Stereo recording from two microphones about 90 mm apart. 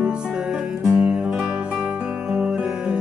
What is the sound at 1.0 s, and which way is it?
Music, 10° right (ahead or behind).